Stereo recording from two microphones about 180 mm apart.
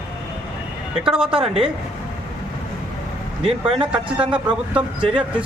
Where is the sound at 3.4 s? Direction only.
30° right (ahead or behind).